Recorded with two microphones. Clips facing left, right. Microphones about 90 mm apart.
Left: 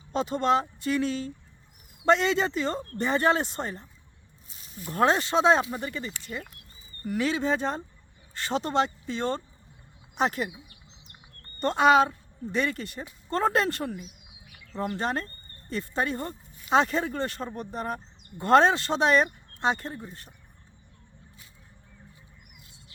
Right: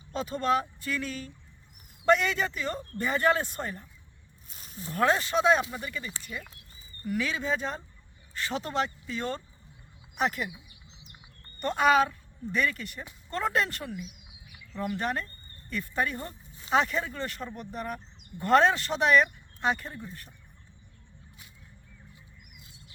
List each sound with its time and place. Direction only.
0.1 s speech: 25° left (ahead or behind)
4.9 s speech: 25° left (ahead or behind)
6.3 s speech: 50° left (ahead or behind)
7.0 s speech: 25° left (ahead or behind)
11.6 s speech: 30° left (ahead or behind)
13.8 s a sound: 45° left (ahead or behind)
14.9 s speech: 30° left (ahead or behind)